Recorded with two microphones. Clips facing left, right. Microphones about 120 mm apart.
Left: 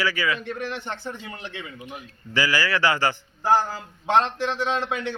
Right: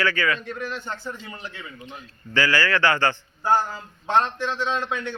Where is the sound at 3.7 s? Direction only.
85° left.